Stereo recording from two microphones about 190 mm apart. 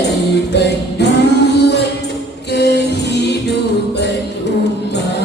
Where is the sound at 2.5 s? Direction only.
60° left (ahead or behind).